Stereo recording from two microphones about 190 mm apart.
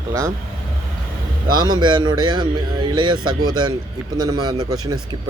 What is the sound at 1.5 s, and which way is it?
Speech, 20° right (ahead or behind).